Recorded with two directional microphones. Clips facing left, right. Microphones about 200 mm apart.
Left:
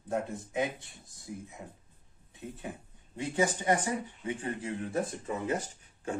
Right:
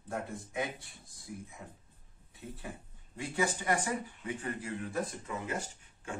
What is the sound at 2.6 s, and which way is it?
Speech, 20° left (ahead or behind).